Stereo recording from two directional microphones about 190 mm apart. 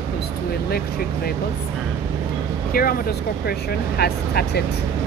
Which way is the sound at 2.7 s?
50° left (ahead or behind).